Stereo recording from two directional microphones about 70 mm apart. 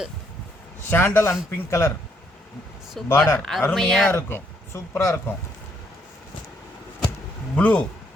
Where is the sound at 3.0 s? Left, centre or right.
Centre.